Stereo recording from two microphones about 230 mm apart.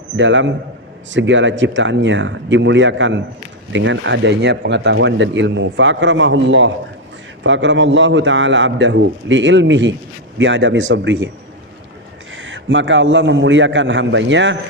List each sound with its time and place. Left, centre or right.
0.2 s speech: right
12.4 s speech: right